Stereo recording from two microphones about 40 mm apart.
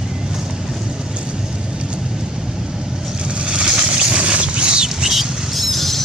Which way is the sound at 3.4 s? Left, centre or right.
Right.